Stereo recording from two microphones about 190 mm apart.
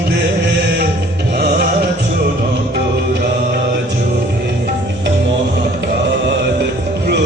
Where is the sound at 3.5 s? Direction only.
55° right (ahead or behind).